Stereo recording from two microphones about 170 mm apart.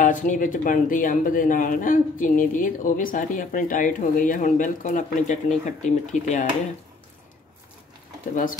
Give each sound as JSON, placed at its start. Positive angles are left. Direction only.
{"t": 0.0, "sound": "speech", "side_deg": 50}